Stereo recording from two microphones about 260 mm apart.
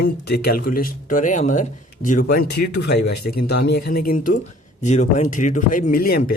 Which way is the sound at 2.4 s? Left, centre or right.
Left.